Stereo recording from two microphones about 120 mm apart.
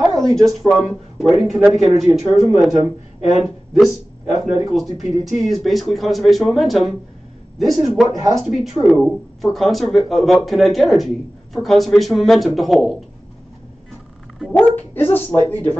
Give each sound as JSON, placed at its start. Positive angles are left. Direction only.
{"t": 0.0, "sound": "speech", "side_deg": 0}
{"t": 3.2, "sound": "speech", "side_deg": 65}
{"t": 3.4, "sound": "speech", "side_deg": -5}
{"t": 14.5, "sound": "speech", "side_deg": 15}